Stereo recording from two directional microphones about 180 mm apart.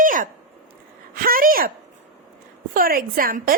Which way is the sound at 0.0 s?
50° right (ahead or behind).